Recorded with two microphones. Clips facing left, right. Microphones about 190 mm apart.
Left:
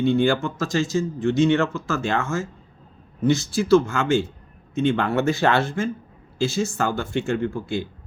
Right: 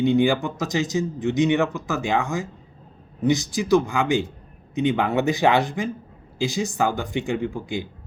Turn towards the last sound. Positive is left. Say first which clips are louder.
# left 2 dB
turn(degrees=-15)  # may be behind; listen again after turning